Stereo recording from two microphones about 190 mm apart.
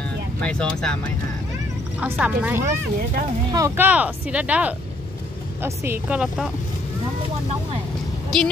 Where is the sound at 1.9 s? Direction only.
5° right (ahead or behind).